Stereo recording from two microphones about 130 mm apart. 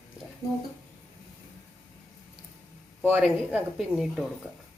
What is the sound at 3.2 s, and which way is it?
A woman's voice, 5° right (ahead or behind).